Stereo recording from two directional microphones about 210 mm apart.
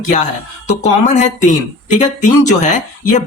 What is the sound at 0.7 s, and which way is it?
Speech, 35° left (ahead or behind).